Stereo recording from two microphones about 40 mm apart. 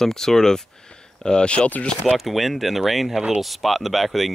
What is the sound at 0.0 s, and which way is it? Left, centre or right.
Speech, centre.